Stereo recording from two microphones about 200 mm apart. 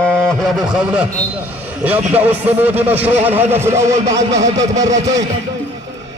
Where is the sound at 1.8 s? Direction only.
5° right (ahead or behind).